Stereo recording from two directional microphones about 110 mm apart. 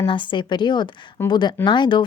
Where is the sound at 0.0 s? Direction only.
50° left (ahead or behind).